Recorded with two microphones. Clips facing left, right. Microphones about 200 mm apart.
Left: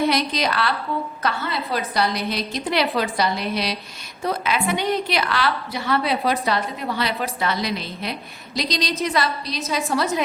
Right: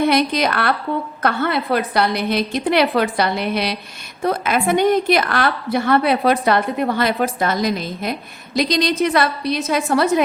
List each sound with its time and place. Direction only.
0.1 s a woman's voice: 55° right (ahead or behind)